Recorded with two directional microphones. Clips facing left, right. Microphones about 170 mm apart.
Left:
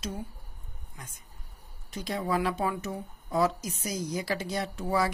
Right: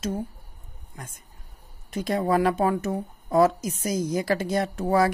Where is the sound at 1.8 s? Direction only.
55° right (ahead or behind).